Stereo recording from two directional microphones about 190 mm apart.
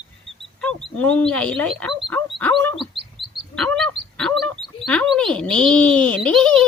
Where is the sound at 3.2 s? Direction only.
25° left (ahead or behind).